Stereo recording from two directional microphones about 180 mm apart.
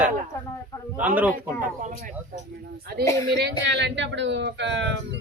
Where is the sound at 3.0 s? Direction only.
15° left (ahead or behind).